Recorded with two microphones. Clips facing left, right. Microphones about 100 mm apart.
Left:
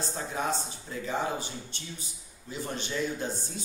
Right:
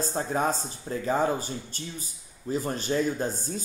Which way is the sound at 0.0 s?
40° right (ahead or behind).